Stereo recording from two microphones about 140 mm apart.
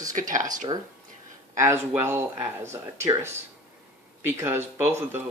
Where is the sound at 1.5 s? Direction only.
20° right (ahead or behind).